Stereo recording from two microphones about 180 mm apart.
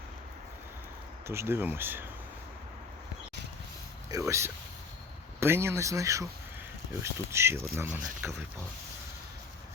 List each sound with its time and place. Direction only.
1.3 s speech: 15° right (ahead or behind)
4.1 s speech: 15° right (ahead or behind)